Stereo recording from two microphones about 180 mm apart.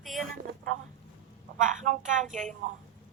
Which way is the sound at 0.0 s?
Centre (ahead or behind).